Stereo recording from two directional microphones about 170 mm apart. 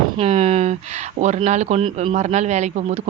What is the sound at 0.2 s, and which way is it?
A man's voice, 40° right (ahead or behind).